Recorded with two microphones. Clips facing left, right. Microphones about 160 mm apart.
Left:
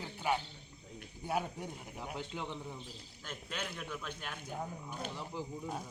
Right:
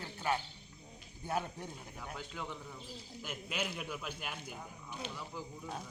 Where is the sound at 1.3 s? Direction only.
10° left (ahead or behind).